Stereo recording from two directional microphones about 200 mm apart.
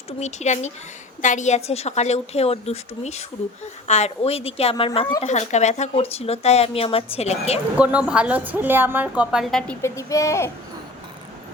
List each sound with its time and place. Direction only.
0.2 s a woman's voice: 35° left (ahead or behind)
5.2 s speech: 35° left (ahead or behind)
7.8 s a woman's voice: 5° right (ahead or behind); by 10.5 s 15° left (ahead or behind)